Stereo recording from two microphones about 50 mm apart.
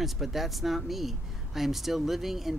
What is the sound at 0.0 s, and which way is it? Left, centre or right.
Speech, centre.